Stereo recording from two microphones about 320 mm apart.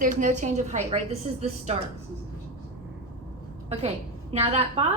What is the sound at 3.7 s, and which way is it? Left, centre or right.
A woman's voice, centre.